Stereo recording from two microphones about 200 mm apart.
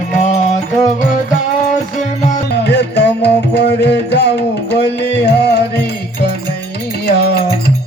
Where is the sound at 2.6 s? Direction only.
60° left (ahead or behind).